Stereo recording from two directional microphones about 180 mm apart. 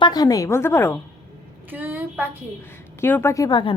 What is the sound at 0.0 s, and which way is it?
Speech, 20° left (ahead or behind).